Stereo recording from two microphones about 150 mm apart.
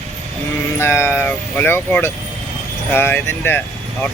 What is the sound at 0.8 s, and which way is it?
Speech, 15° left (ahead or behind).